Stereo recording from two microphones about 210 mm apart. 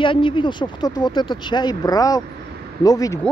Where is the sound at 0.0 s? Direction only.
25° left (ahead or behind).